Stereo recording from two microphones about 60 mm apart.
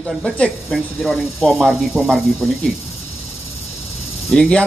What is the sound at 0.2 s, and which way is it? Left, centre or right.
Speech, centre.